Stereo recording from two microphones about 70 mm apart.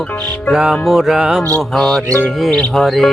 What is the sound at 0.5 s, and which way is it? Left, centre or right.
Speech, centre.